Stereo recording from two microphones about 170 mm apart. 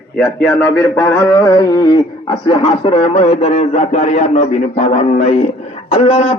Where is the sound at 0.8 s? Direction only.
15° left (ahead or behind).